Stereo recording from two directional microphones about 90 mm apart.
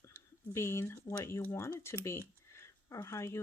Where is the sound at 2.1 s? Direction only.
30° left (ahead or behind).